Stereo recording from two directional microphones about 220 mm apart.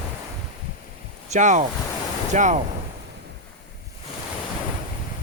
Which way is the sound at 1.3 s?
35° right (ahead or behind).